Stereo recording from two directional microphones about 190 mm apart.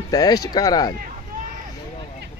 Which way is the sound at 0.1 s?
20° left (ahead or behind).